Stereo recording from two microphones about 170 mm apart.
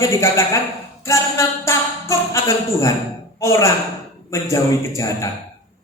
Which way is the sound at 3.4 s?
15° left (ahead or behind).